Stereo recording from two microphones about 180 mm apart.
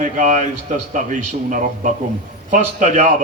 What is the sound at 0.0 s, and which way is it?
A man's voice, 45° right (ahead or behind).